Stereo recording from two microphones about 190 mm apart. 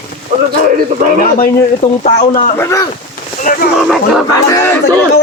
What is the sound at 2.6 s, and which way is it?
Speech, 15° left (ahead or behind).